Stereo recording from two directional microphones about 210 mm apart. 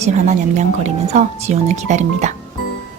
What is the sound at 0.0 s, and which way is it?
Speech, 35° right (ahead or behind).